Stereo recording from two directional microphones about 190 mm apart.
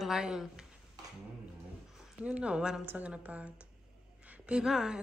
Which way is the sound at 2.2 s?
5° right (ahead or behind).